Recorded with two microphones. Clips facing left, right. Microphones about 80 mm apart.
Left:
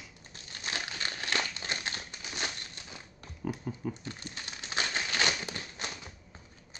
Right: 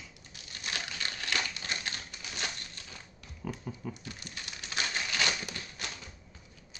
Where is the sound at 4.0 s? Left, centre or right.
Left.